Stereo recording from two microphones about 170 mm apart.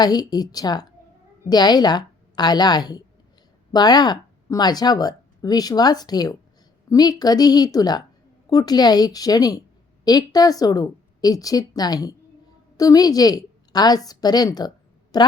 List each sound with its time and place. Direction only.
0.0 s a woman's voice: 25° left (ahead or behind)